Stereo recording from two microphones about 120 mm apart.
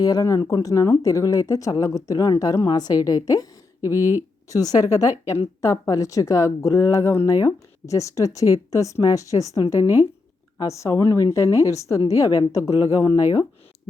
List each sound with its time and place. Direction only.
0.0 s a woman's voice: 30° left (ahead or behind)
3.9 s speech: 20° right (ahead or behind)
4.4 s a woman's voice: 30° left (ahead or behind)
9.8 s speech: 20° right (ahead or behind)
10.6 s a woman's voice: 25° left (ahead or behind)